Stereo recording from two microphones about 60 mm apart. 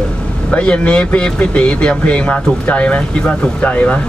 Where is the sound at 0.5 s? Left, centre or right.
Centre.